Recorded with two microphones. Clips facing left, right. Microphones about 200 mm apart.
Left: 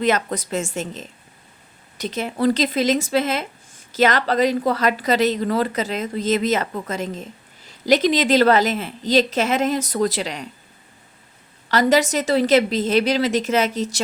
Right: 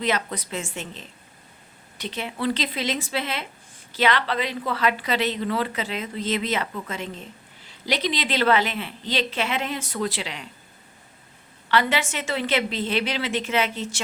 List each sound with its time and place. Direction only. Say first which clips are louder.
0.0 s a woman's voice: left 6 dB; 45° left (ahead or behind)
11.7 s a woman's voice: left 6 dB; 40° left (ahead or behind)